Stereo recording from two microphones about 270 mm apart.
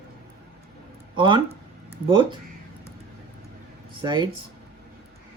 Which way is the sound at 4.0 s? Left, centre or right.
Centre.